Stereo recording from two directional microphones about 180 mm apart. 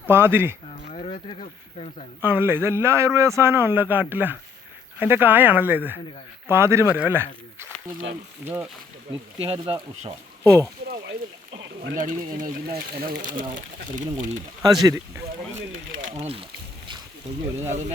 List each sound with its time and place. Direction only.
0.0 s a man's voice: 10° right (ahead or behind)
0.9 s a sound: 35° left (ahead or behind)
2.2 s a man's voice: 10° right (ahead or behind)
9.4 s speech: 30° right (ahead or behind)
11.5 s a sound: 80° right
11.9 s speech: 45° right (ahead or behind)
14.6 s speech: 20° right (ahead or behind)
16.1 s speech: 30° right (ahead or behind)
17.7 s speech: 40° right (ahead or behind)